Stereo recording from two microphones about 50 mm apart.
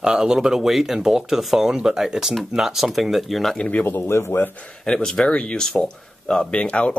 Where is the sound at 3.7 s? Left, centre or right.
Left.